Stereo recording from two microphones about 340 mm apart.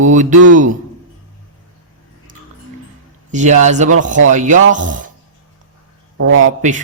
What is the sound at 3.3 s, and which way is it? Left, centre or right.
Speech, right.